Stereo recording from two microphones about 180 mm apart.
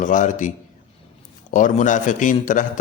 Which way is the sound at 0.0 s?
45° left (ahead or behind).